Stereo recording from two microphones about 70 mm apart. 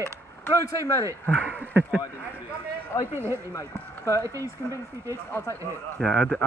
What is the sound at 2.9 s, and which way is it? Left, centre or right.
A man's voice, left.